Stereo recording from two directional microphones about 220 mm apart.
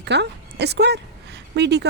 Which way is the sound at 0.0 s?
50° right (ahead or behind).